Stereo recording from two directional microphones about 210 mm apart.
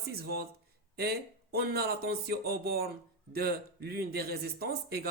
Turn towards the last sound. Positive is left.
turn(degrees=-50)  # may be behind; listen again after turning